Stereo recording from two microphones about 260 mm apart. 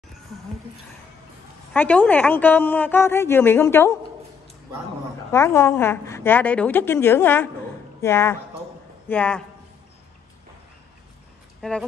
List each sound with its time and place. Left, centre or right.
1.7 s a woman's voice: centre
5.3 s a woman's voice: centre
11.6 s a woman's voice: centre